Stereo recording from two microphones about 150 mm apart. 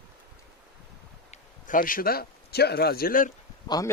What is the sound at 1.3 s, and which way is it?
Speech, 65° left (ahead or behind).